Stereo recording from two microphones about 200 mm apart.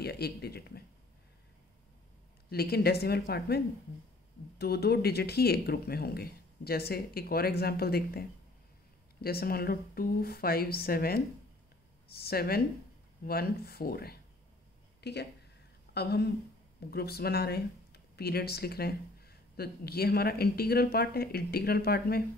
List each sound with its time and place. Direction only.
0.0 s speech: 50° left (ahead or behind)
2.5 s a woman's voice: 50° left (ahead or behind)